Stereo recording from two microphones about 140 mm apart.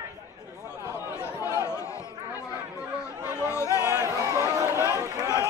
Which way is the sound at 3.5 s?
25° left (ahead or behind).